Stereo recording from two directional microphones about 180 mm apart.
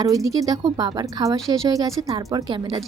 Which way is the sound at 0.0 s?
20° right (ahead or behind).